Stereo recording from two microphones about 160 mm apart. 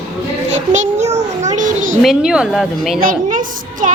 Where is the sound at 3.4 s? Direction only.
60° right (ahead or behind).